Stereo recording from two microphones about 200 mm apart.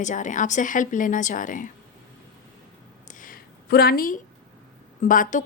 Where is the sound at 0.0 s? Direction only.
40° left (ahead or behind).